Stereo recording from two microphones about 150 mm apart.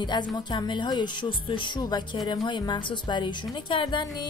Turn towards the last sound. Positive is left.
turn(degrees=30)  # may be behind; listen again after turning